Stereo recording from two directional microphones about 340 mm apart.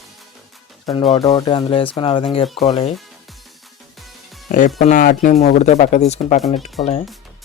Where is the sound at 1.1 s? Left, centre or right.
Centre.